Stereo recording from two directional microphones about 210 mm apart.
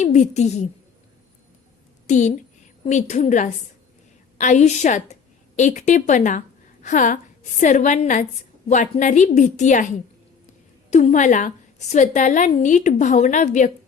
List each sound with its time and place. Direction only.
0.0 s a woman's voice: 35° left (ahead or behind)
2.0 s a woman's voice: 35° left (ahead or behind)
10.9 s a woman's voice: 35° left (ahead or behind)